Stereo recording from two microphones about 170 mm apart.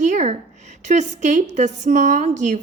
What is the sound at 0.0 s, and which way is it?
A woman's voice, 45° right (ahead or behind).